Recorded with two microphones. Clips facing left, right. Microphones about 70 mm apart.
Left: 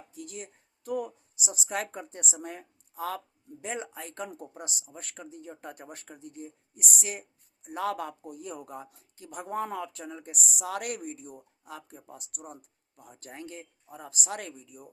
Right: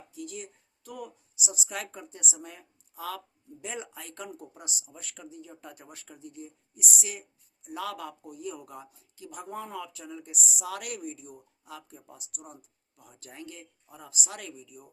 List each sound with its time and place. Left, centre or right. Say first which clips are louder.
0.1 s speech: right 2 dB; left